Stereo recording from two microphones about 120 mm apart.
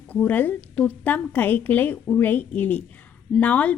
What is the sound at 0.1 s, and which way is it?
A woman's voice, 15° left (ahead or behind).